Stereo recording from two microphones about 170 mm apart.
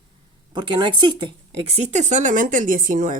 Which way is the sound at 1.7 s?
45° right (ahead or behind).